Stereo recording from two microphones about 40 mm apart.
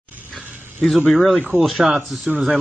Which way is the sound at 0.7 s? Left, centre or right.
Centre.